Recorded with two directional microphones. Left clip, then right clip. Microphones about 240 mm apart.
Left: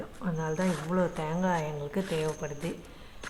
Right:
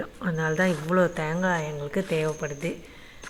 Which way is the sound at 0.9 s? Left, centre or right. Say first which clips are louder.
Right 6 dB; centre.